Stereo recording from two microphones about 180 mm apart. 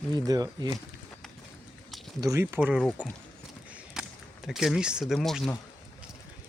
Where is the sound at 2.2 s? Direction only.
15° right (ahead or behind).